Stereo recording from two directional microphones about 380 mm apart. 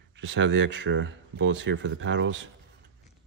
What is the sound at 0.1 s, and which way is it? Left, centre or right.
Speech, right.